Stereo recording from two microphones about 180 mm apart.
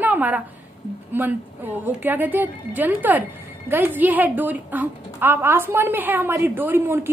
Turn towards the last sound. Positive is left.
turn(degrees=-10)  # may be behind; listen again after turning